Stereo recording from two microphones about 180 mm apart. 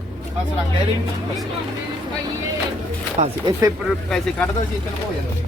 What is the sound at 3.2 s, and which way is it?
Speech, 40° right (ahead or behind).